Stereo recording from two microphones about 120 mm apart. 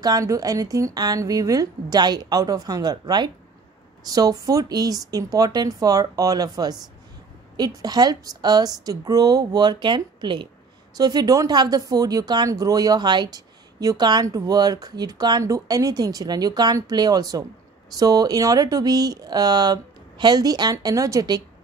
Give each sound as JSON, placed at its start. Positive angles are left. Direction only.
{"t": 0.0, "sound": "speech", "side_deg": -30}